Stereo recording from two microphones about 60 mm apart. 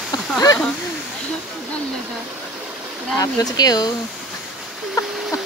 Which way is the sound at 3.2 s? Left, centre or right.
Left.